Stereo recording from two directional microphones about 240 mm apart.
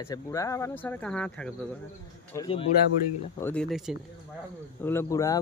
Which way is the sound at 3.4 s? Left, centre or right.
Centre.